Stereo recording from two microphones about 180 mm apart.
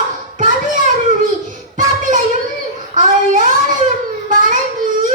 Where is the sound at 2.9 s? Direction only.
45° right (ahead or behind).